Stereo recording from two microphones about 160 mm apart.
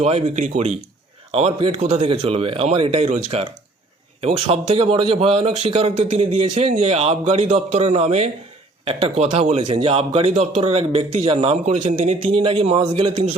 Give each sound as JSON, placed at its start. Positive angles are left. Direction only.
{"t": 0.0, "sound": "a man's voice", "side_deg": -40}